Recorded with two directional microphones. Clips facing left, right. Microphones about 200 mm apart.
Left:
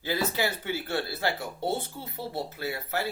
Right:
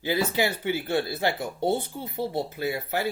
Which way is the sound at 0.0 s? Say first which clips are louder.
Right 3 dB; 15° right (ahead or behind).